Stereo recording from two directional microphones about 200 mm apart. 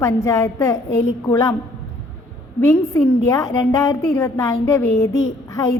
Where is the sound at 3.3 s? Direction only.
15° left (ahead or behind).